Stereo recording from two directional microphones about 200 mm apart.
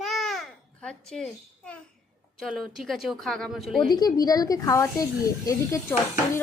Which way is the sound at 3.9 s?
20° left (ahead or behind).